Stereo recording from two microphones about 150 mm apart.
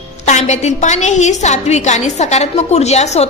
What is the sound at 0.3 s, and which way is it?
A woman's voice, 50° left (ahead or behind).